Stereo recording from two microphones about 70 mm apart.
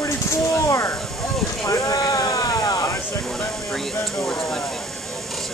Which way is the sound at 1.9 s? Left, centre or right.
Left.